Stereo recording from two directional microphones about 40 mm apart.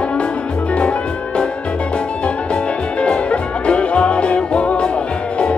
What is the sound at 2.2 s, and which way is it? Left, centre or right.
Music, left.